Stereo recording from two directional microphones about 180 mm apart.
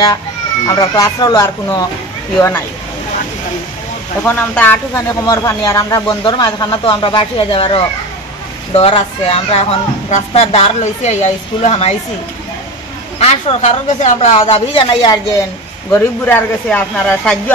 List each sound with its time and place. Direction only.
0.7 s speech: 20° left (ahead or behind)
4.2 s speech: 10° left (ahead or behind); by 11.9 s 35° left (ahead or behind)
13.2 s speech: 35° left (ahead or behind)
15.9 s speech: 10° left (ahead or behind)